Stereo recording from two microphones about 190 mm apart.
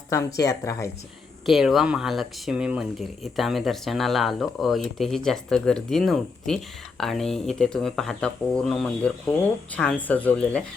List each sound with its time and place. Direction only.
0.3 s speech: 15° left (ahead or behind)
1.5 s speech: centre (ahead or behind)